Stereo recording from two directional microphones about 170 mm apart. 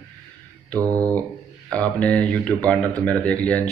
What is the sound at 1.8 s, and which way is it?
Speech, 10° left (ahead or behind).